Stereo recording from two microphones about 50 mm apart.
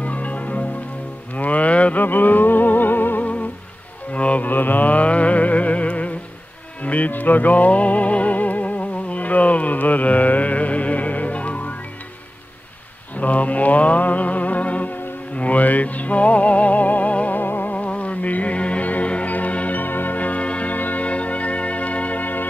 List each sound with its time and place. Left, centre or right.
0.0 s music: left
2.0 s music: left
4.1 s music: left
4.5 s music: left
13.1 s music: left
17.4 s music: left
17.7 s music: left